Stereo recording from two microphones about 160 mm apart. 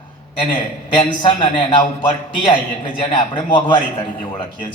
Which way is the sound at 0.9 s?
30° left (ahead or behind).